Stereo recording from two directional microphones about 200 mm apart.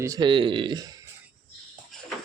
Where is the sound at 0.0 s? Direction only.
20° right (ahead or behind).